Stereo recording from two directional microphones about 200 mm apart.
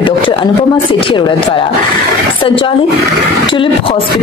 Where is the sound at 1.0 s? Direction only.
25° left (ahead or behind).